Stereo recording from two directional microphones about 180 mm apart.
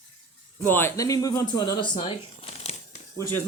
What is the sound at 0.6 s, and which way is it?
Speech, 10° left (ahead or behind).